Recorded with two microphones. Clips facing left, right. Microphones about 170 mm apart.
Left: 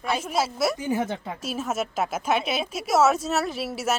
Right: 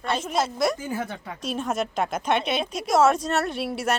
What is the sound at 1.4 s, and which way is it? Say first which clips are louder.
Speech: right 3 dB; 5° left (ahead or behind).